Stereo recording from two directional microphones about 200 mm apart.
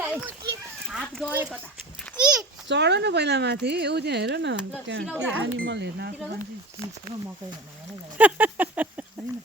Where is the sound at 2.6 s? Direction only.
60° right (ahead or behind).